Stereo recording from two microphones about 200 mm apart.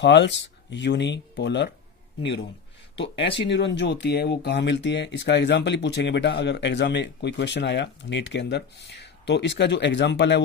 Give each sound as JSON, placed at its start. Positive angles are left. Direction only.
{"t": 0.0, "sound": "speech", "side_deg": 60}
{"t": 3.5, "sound": "speech", "side_deg": 60}